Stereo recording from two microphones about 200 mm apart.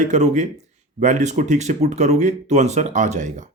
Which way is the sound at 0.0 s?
35° right (ahead or behind).